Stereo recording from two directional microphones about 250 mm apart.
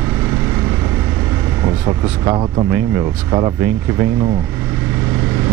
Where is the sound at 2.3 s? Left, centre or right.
Centre.